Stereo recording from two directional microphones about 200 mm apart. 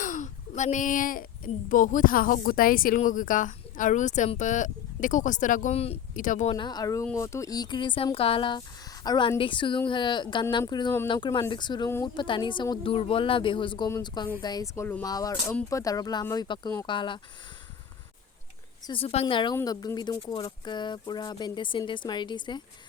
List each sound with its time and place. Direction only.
0.0 s a sound: 40° left (ahead or behind)
1.7 s speech: 40° left (ahead or behind)
6.6 s speech: 20° left (ahead or behind)
18.9 s speech: 30° left (ahead or behind)